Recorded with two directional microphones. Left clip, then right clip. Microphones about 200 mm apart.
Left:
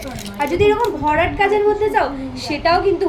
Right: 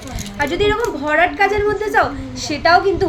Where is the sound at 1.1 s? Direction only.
40° right (ahead or behind).